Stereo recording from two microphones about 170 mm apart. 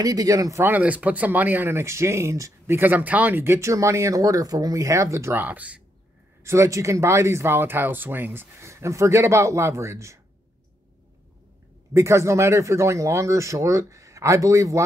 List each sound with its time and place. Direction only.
0.0 s speech: 20° right (ahead or behind)
11.9 s speech: 15° right (ahead or behind)